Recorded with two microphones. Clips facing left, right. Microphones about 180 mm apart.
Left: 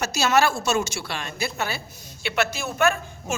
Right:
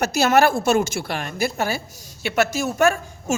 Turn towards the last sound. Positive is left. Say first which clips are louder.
# right 4 dB
turn(degrees=-45)  # may be behind; listen again after turning